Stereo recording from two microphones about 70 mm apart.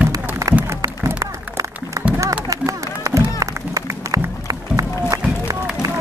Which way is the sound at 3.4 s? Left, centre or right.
Right.